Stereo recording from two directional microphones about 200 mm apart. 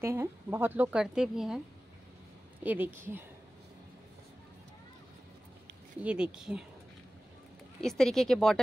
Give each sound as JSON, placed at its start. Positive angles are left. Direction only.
{"t": 0.0, "sound": "a woman's voice", "side_deg": -10}
{"t": 2.6, "sound": "speech", "side_deg": -10}
{"t": 6.0, "sound": "a woman's voice", "side_deg": -5}
{"t": 7.8, "sound": "a woman's voice", "side_deg": 0}